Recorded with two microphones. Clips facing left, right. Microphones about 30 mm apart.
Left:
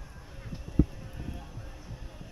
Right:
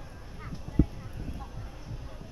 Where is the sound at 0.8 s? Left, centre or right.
Centre.